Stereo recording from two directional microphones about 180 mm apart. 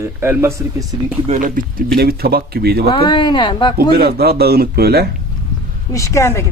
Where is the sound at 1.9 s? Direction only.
60° right (ahead or behind).